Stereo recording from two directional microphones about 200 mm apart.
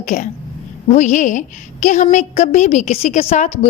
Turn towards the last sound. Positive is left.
turn(degrees=35)  # may be behind; listen again after turning